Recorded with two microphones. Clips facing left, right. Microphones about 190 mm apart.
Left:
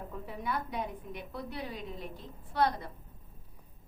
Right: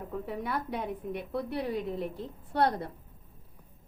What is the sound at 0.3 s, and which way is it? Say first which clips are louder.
Speech: right 1 dB; 70° right (ahead or behind).